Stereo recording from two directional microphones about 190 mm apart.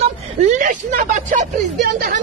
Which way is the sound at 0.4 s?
40° right (ahead or behind).